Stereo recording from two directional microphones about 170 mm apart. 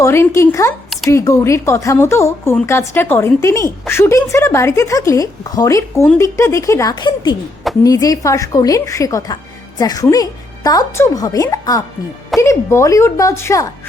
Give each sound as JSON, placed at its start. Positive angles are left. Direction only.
{"t": 0.0, "sound": "speech", "side_deg": 15}